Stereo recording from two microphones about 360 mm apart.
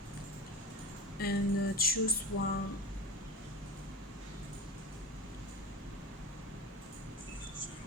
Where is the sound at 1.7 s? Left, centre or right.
Left.